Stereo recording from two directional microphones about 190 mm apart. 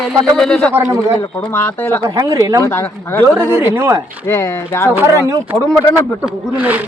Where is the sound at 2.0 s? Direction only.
15° right (ahead or behind).